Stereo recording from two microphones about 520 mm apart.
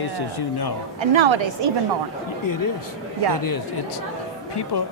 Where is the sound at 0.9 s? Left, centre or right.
Right.